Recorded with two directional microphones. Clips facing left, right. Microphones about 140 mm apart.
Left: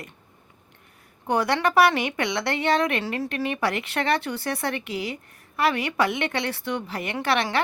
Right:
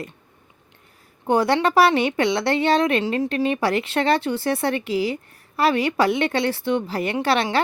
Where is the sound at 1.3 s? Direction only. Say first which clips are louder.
Right 4 dB; 30° right (ahead or behind).